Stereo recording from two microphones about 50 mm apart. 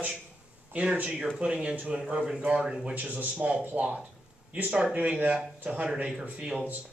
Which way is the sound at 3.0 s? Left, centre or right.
Right.